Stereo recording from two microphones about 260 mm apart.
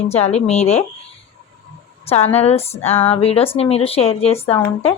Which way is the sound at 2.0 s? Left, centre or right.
Left.